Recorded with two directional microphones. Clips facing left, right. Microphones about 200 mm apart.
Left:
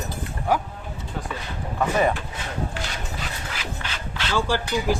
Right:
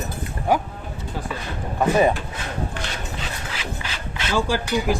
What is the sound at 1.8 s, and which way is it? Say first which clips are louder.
Speech: right 4 dB; 20° right (ahead or behind).